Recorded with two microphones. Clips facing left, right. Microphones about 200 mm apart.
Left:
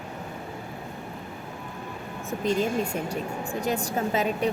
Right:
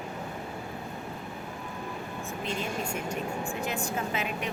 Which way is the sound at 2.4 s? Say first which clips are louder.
Left 9 dB; 35° left (ahead or behind).